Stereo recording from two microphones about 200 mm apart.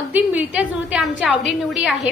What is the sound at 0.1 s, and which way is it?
A woman's voice, 10° right (ahead or behind).